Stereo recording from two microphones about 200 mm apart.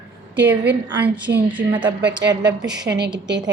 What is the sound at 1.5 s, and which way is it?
Speech, 25° right (ahead or behind).